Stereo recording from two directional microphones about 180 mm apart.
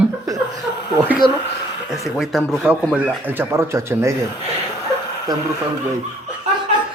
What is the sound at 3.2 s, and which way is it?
Speech, 10° right (ahead or behind).